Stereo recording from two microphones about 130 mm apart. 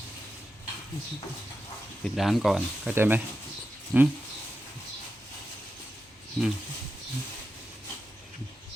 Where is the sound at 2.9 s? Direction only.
15° right (ahead or behind).